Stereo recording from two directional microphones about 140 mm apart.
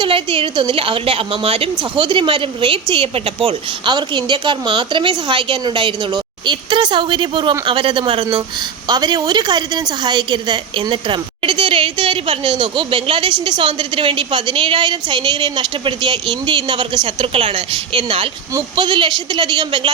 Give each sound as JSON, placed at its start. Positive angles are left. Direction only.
{"t": 0.0, "sound": "a woman's voice", "side_deg": -40}